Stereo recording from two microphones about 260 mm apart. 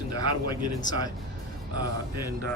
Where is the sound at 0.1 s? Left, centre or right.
Left.